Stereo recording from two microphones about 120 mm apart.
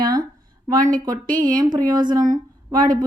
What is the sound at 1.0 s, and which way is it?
A woman's voice, 35° right (ahead or behind).